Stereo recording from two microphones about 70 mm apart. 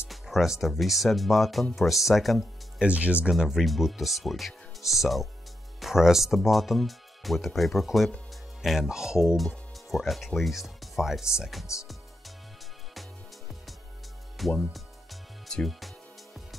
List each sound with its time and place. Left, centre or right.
0.1 s speech: centre
2.8 s speech: centre
3.3 s speech: centre
14.4 s speech: centre
15.4 s music: centre